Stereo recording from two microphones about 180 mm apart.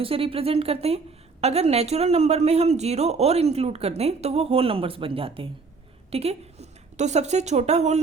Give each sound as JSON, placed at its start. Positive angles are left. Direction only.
{"t": 0.0, "sound": "a woman's voice", "side_deg": -30}